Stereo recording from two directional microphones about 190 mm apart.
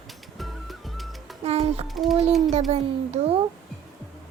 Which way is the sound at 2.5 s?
35° right (ahead or behind).